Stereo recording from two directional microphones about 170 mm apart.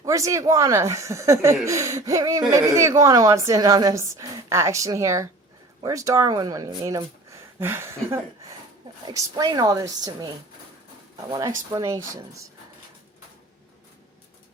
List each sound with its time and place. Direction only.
0.0 s speech: 20° right (ahead or behind)
9.0 s speech: 20° right (ahead or behind)
11.3 s speech: 20° right (ahead or behind)